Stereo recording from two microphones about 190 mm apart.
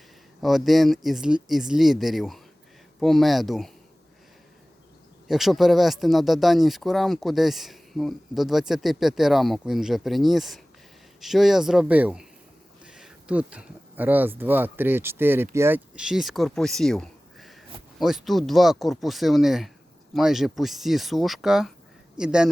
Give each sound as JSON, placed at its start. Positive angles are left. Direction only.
{"t": 0.4, "sound": "speech", "side_deg": 0}
{"t": 5.3, "sound": "speech", "side_deg": 0}